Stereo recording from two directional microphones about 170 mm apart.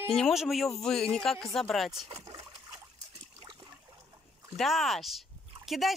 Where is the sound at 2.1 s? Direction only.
20° right (ahead or behind).